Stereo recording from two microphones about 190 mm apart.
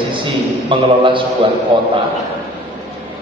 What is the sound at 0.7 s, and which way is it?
A man's voice, 25° right (ahead or behind).